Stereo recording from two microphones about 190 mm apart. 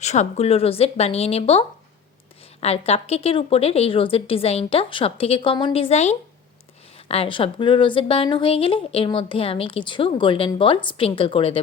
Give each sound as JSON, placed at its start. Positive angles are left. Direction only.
{"t": 0.0, "sound": "a woman's voice", "side_deg": 35}